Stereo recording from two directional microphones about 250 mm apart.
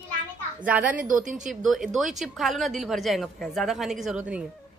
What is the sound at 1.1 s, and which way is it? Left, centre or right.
Speech, right.